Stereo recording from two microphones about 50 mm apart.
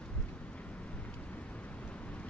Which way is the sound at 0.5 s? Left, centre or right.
Left.